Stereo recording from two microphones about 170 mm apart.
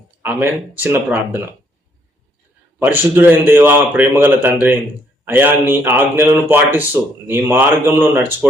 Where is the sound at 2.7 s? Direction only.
10° right (ahead or behind).